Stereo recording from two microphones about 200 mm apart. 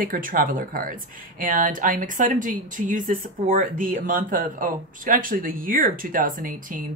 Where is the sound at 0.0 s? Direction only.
45° right (ahead or behind).